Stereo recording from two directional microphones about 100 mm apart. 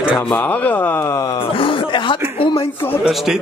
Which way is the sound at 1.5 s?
55° left (ahead or behind).